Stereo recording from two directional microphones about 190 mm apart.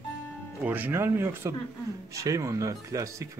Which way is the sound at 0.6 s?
10° right (ahead or behind).